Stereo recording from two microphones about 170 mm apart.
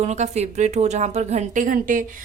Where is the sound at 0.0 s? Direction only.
40° right (ahead or behind).